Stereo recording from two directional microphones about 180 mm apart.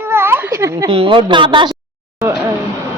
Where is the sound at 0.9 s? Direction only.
30° right (ahead or behind).